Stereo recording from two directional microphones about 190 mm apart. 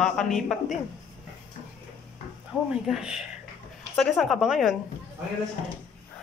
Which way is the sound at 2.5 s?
10° left (ahead or behind).